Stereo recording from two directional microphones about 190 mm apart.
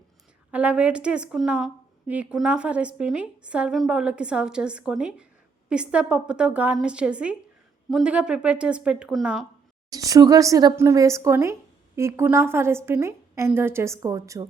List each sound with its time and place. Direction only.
0.5 s a woman's voice: 5° right (ahead or behind)
9.9 s a woman's voice: 20° right (ahead or behind)